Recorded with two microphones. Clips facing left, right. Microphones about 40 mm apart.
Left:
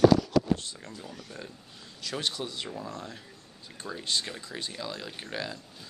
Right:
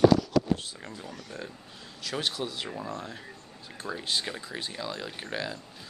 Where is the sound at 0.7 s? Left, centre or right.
Right.